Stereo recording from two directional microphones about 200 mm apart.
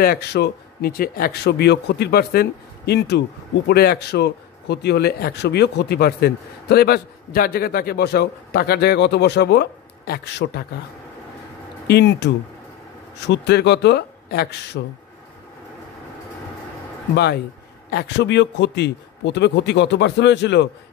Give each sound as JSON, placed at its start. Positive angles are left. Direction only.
{"t": 0.0, "sound": "speech", "side_deg": 50}
{"t": 11.9, "sound": "a man's voice", "side_deg": 55}
{"t": 17.1, "sound": "a man's voice", "side_deg": 55}